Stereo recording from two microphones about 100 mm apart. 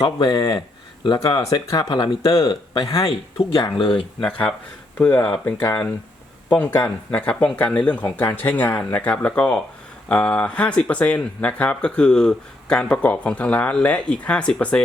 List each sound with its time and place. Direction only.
0.0 s speech: 50° left (ahead or behind)
4.2 s speech: 10° left (ahead or behind)